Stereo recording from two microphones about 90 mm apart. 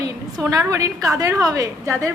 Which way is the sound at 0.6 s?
40° right (ahead or behind).